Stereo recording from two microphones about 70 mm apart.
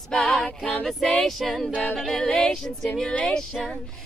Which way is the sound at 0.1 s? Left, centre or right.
Centre.